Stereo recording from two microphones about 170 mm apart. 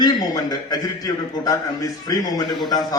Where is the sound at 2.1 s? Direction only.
20° left (ahead or behind).